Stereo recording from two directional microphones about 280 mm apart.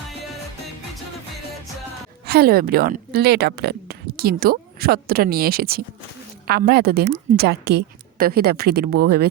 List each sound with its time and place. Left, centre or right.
2.2 s speech: right